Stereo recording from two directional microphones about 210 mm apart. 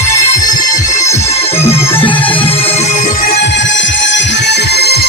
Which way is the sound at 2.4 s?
25° left (ahead or behind).